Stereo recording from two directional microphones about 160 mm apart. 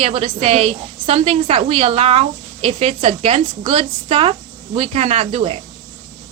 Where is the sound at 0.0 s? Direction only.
40° right (ahead or behind).